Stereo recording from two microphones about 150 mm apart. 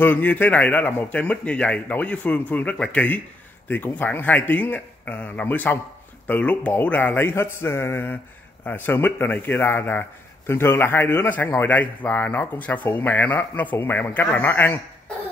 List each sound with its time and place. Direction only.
0.0 s a man's voice: 10° left (ahead or behind)